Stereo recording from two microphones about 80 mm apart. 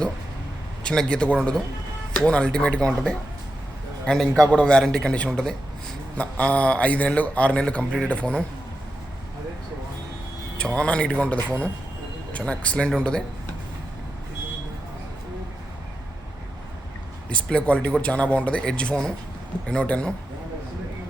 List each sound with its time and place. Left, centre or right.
0.9 s speech: centre
10.8 s speech: centre
17.2 s speech: centre